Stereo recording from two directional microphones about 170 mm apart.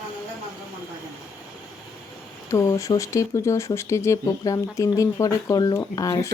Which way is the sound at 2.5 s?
20° left (ahead or behind).